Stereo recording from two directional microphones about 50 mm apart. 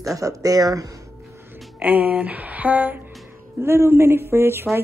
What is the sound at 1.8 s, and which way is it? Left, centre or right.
A woman's voice, right.